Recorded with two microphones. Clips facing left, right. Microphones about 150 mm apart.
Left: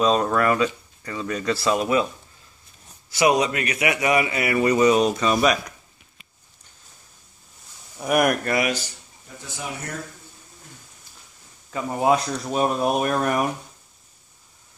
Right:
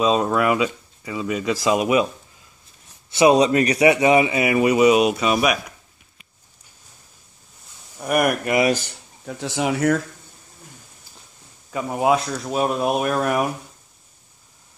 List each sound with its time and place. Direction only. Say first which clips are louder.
0.0 s speech: right 1 dB; 10° right (ahead or behind)
3.1 s a man's voice: right 5 dB; 25° right (ahead or behind); by 5.6 s 10° right (ahead or behind)
8.0 s speech: even; centre (ahead or behind)
9.2 s speech: right 11 dB; 90° right
11.7 s speech: right 1 dB; 10° right (ahead or behind)